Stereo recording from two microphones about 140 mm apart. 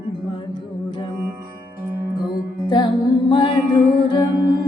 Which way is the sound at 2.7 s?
35° left (ahead or behind).